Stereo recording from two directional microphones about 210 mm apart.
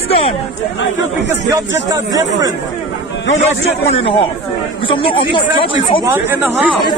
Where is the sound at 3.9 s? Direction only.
25° left (ahead or behind).